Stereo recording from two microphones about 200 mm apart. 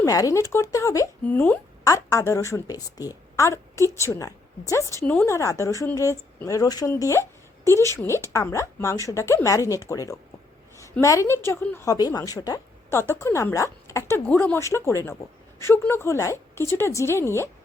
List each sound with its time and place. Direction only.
0.0 s a woman's voice: 15° left (ahead or behind)